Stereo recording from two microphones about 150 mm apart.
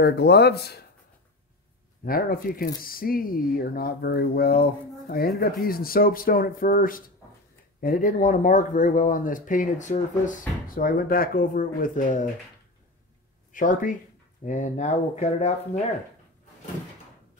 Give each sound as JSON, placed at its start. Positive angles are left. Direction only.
{"t": 0.0, "sound": "speech", "side_deg": 90}
{"t": 2.0, "sound": "speech", "side_deg": 75}
{"t": 5.4, "sound": "speech", "side_deg": 80}
{"t": 13.5, "sound": "speech", "side_deg": 60}